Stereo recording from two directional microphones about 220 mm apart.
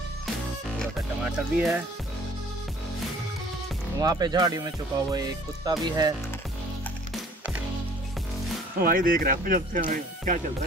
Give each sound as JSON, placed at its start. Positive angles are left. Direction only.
{"t": 0.7, "sound": "music", "side_deg": -5}
{"t": 4.0, "sound": "speech", "side_deg": -15}
{"t": 8.8, "sound": "speech", "side_deg": -40}